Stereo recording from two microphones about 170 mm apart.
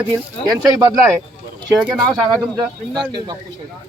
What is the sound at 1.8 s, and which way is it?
Speech, 5° right (ahead or behind).